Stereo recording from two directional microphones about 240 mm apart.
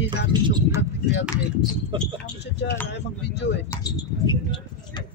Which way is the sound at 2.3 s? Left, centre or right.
Left.